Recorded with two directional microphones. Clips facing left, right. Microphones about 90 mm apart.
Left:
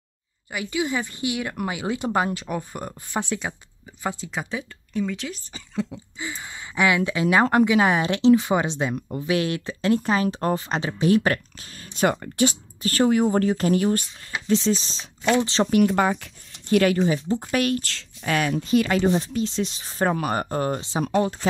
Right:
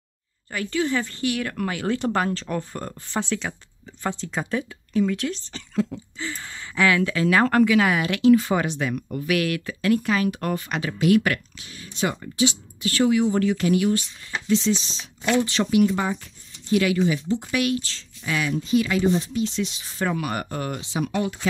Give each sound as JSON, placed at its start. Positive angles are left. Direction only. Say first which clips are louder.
{"t": 0.5, "sound": "speech", "louder": "right 2 dB", "side_deg": 15}
{"t": 4.2, "sound": "a woman's voice", "louder": "right 3 dB", "side_deg": 5}
{"t": 15.7, "sound": "speech", "louder": "left 1 dB", "side_deg": 50}
{"t": 19.0, "sound": "speech", "louder": "even", "side_deg": 35}